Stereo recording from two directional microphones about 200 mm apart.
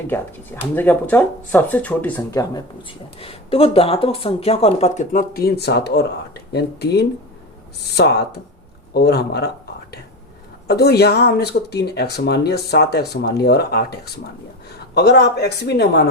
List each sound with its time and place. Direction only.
0.1 s speech: 10° left (ahead or behind)
3.2 s speech: 30° left (ahead or behind); by 9.5 s 55° left (ahead or behind)
10.7 s a man's voice: 55° left (ahead or behind)